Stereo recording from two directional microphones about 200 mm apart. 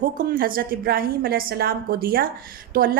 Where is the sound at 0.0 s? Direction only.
45° right (ahead or behind).